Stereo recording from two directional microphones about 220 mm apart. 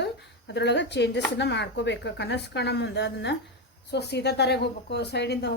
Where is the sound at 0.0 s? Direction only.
50° left (ahead or behind).